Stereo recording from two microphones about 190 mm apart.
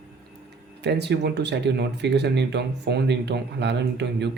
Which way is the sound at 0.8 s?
60° right (ahead or behind).